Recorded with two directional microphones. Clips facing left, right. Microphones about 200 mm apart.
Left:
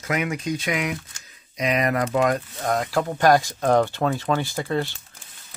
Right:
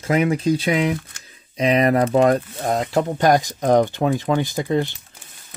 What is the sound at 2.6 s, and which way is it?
Speech, 20° right (ahead or behind).